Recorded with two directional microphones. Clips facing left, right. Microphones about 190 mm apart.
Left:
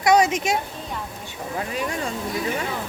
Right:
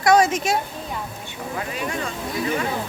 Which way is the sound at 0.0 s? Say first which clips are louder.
Right 1 dB; 20° left (ahead or behind).